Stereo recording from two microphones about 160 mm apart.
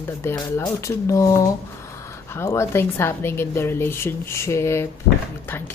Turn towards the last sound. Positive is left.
turn(degrees=15)  # may be behind; listen again after turning